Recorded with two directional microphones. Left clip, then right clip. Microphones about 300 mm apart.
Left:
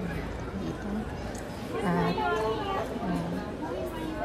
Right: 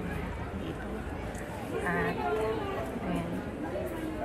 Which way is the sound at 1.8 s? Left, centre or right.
Centre.